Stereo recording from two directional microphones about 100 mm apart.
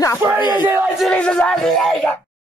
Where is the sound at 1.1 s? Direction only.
10° left (ahead or behind).